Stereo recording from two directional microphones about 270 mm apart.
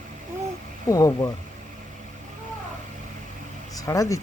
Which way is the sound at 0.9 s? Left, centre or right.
Centre.